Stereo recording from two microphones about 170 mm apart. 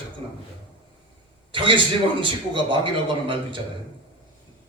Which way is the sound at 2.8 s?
30° right (ahead or behind).